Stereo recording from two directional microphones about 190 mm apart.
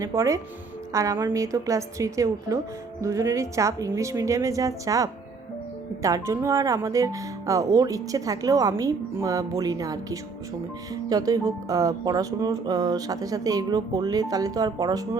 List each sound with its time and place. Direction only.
0.0 s speech: 15° right (ahead or behind)